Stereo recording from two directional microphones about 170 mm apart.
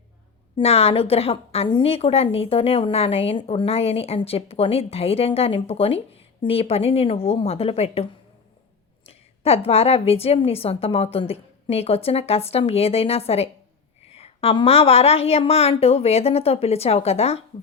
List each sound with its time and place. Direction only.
0.5 s a woman's voice: 35° left (ahead or behind)
9.0 s a woman's voice: 35° left (ahead or behind)